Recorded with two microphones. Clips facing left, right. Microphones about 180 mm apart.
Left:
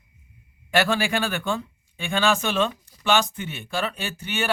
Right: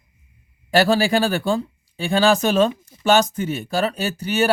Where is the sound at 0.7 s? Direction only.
35° right (ahead or behind).